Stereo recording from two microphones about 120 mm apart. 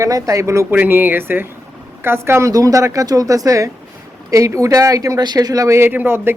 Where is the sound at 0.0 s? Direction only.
30° right (ahead or behind).